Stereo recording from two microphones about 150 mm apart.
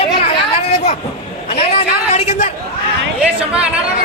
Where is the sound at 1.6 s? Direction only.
45° left (ahead or behind).